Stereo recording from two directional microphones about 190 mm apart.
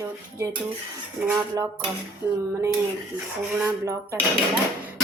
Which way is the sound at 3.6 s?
10° right (ahead or behind).